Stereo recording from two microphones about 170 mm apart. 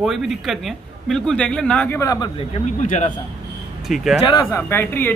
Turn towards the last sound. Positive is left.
turn(degrees=15)  # may be behind; listen again after turning